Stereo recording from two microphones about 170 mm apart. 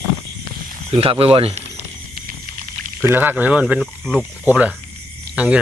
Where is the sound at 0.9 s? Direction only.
35° right (ahead or behind).